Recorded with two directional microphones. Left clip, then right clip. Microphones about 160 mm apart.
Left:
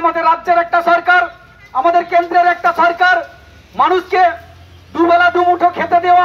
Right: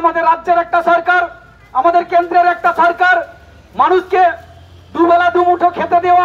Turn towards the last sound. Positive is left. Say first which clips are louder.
# even
turn(degrees=20)  # may be behind; listen again after turning